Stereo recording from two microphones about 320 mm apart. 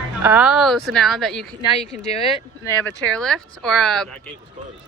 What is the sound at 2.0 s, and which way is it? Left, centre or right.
Speech, centre.